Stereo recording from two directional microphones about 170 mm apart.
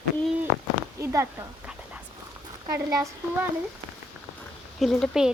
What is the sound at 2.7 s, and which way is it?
Speech, 20° right (ahead or behind).